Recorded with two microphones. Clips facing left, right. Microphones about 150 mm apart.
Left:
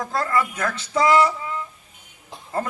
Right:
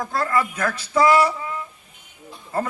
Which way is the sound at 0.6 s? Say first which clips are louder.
Right 2 dB; 30° left (ahead or behind).